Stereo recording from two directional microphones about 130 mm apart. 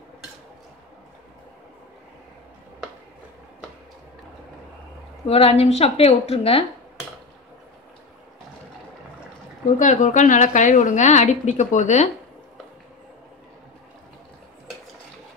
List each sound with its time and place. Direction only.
5.2 s a woman's voice: 50° left (ahead or behind)
9.8 s a woman's voice: 75° left (ahead or behind)